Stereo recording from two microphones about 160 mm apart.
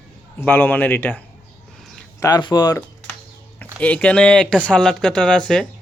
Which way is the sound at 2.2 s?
25° left (ahead or behind).